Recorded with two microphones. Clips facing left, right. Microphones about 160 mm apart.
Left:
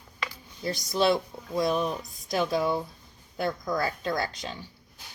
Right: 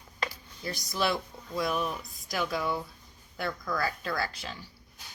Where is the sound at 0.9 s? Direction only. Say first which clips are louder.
Left 6 dB; 25° left (ahead or behind).